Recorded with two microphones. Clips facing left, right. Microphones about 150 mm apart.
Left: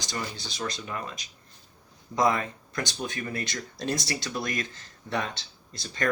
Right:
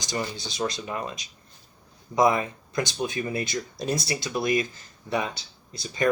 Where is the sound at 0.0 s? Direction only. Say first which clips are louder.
Right 4 dB; 15° right (ahead or behind).